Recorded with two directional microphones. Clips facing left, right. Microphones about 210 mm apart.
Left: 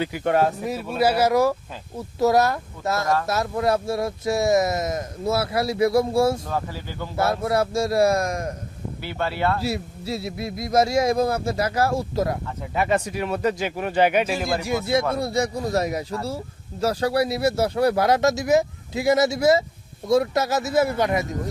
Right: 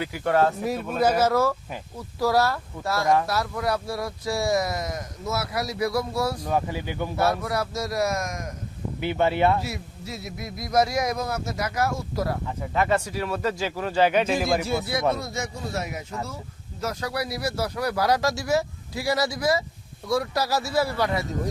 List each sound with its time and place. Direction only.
0.0 s speech: 20° left (ahead or behind)
0.6 s speech: 5° left (ahead or behind); by 6.4 s 25° left (ahead or behind)
6.5 s speech: 15° right (ahead or behind)
7.2 s speech: 25° left (ahead or behind)
9.0 s speech: 20° right (ahead or behind)
9.6 s speech: 30° left (ahead or behind); by 14.3 s 10° left (ahead or behind)
15.2 s speech: 35° left (ahead or behind); by 21.2 s 20° left (ahead or behind)